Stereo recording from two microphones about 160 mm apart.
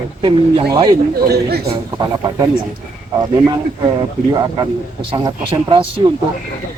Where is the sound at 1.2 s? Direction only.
80° right.